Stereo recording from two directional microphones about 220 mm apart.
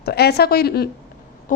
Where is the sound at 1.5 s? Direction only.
40° left (ahead or behind).